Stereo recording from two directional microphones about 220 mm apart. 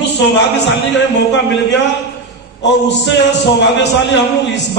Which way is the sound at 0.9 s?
55° left (ahead or behind).